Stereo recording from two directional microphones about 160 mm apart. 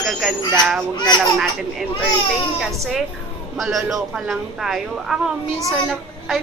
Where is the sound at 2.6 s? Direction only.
Centre (ahead or behind).